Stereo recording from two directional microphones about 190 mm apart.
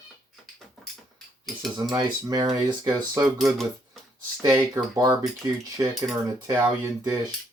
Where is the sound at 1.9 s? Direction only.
20° right (ahead or behind).